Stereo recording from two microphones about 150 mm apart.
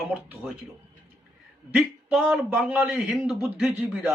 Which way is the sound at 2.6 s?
10° right (ahead or behind).